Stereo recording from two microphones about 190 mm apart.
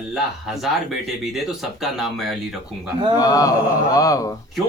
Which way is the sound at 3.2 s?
20° left (ahead or behind).